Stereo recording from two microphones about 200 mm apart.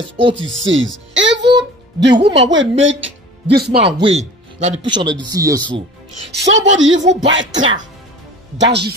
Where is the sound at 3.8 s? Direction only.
30° right (ahead or behind).